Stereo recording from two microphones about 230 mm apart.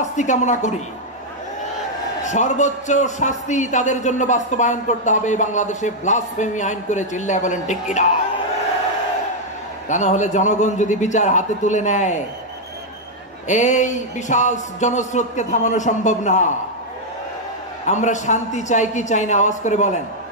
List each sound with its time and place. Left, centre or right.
0.1 s a man's voice: left
2.2 s a man's voice: left
9.8 s a man's voice: left
13.5 s a man's voice: left
17.8 s a man's voice: left